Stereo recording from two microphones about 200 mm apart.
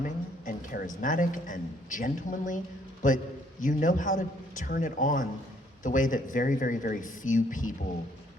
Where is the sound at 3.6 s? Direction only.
40° left (ahead or behind).